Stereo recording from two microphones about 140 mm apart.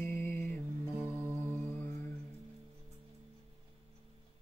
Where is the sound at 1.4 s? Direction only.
15° left (ahead or behind).